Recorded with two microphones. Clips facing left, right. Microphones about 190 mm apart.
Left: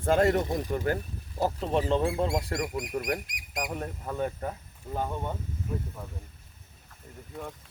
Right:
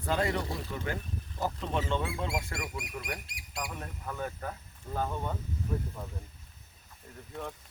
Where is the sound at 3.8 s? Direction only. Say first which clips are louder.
Left 6 dB; 25° left (ahead or behind).